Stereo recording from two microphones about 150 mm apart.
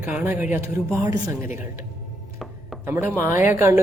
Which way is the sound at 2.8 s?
15° right (ahead or behind).